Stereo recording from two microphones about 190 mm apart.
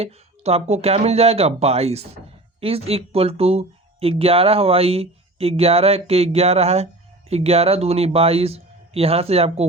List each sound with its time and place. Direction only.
0.0 s speech: 35° right (ahead or behind)